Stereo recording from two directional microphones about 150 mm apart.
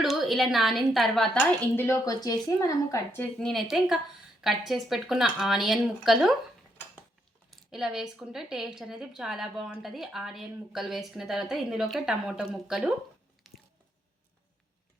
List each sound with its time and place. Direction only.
0.0 s a woman's voice: centre (ahead or behind); by 3.2 s 20° left (ahead or behind)
3.3 s speech: centre (ahead or behind)
7.5 s speech: 5° right (ahead or behind)
13.5 s squish: centre (ahead or behind)